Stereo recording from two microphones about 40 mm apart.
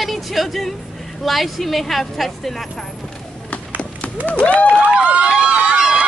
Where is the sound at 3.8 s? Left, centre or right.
Left.